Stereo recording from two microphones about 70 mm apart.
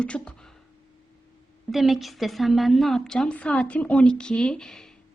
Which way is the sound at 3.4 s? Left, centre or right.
Centre.